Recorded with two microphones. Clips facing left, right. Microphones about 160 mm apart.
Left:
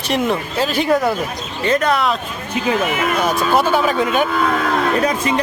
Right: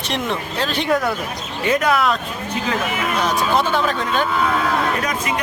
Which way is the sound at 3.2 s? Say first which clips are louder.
Left 2 dB; 10° left (ahead or behind).